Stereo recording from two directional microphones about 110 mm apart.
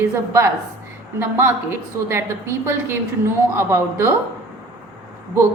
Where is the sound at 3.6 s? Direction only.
25° right (ahead or behind).